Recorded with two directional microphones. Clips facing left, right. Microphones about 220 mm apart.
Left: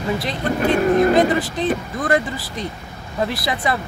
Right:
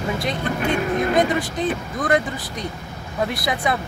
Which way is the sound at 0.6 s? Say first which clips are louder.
Left 7 dB; 45° left (ahead or behind).